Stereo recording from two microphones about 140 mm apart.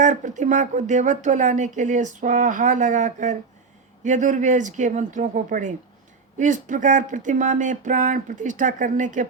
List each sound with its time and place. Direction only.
0.0 s speech: 65° right (ahead or behind)